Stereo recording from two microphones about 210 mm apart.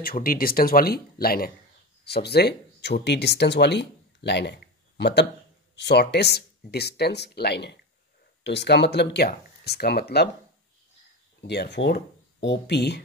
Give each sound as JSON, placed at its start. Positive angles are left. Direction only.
{"t": 0.0, "sound": "speech", "side_deg": 45}
{"t": 11.4, "sound": "speech", "side_deg": 55}